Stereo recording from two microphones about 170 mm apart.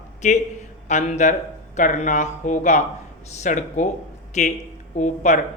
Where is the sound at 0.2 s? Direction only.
45° left (ahead or behind).